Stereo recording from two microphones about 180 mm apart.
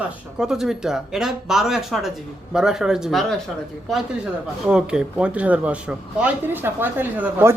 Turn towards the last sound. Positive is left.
turn(degrees=-10)  # may be behind; listen again after turning